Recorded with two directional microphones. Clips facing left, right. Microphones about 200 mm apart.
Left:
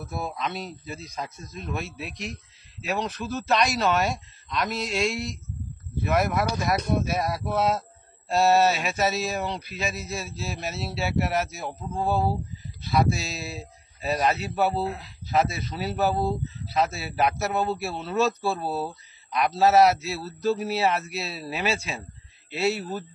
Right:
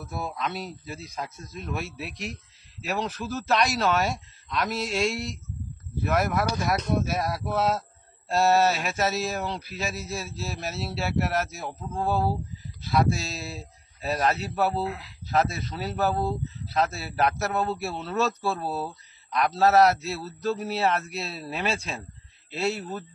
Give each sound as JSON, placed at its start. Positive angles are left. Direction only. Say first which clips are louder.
{"t": 0.1, "sound": "a man's voice", "louder": "even", "side_deg": 0}
{"t": 14.8, "sound": "speech", "louder": "left 1 dB", "side_deg": 30}
{"t": 15.3, "sound": "a man's voice", "louder": "left 1 dB", "side_deg": 5}